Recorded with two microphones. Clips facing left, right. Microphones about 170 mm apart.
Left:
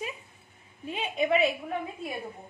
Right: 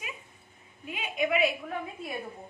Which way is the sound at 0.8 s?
30° left (ahead or behind).